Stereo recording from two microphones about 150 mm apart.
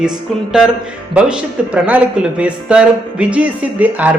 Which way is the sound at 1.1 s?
10° right (ahead or behind).